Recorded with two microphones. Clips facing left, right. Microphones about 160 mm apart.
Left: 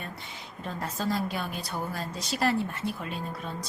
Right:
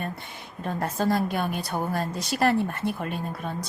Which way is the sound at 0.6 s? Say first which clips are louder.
Right 6 dB; 55° right (ahead or behind).